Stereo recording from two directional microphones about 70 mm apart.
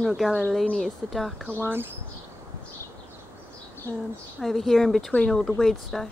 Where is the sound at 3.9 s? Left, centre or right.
Left.